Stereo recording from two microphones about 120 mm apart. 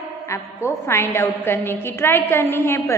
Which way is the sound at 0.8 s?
20° left (ahead or behind).